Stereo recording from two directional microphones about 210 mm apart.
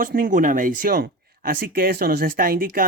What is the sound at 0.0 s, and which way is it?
Speech, 40° right (ahead or behind).